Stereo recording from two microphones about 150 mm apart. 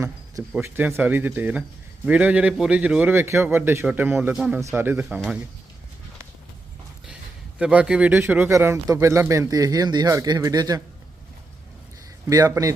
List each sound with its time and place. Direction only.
0.6 s a man's voice: 15° right (ahead or behind)
7.6 s a man's voice: 10° right (ahead or behind); by 10.8 s 25° right (ahead or behind)
12.3 s a man's voice: 25° right (ahead or behind)